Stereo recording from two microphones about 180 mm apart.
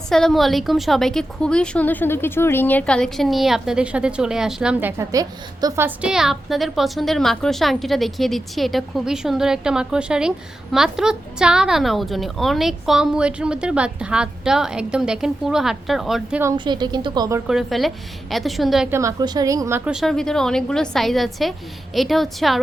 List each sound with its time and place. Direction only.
0.1 s a woman's voice: centre (ahead or behind)
16.6 s speech: 25° right (ahead or behind)
17.5 s a woman's voice: centre (ahead or behind)
18.9 s a woman's voice: 15° right (ahead or behind); by 22.5 s centre (ahead or behind)